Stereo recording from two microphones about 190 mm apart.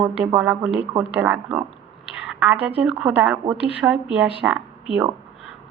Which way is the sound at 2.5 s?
30° right (ahead or behind).